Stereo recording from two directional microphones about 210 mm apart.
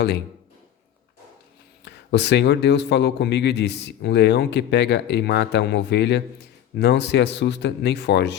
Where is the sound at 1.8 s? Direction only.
55° left (ahead or behind).